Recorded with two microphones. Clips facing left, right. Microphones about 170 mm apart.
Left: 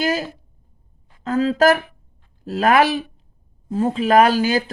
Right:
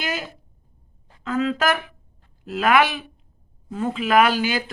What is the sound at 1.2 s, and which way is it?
Speech, 35° left (ahead or behind).